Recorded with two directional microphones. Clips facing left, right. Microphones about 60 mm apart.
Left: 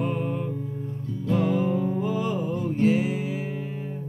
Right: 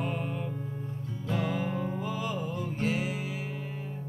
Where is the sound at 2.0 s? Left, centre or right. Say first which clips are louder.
Left 7 dB; left.